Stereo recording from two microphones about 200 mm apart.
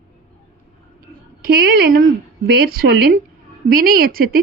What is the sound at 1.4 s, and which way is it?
A woman's voice, 50° right (ahead or behind).